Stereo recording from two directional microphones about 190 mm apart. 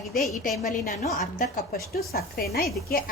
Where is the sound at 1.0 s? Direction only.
40° left (ahead or behind).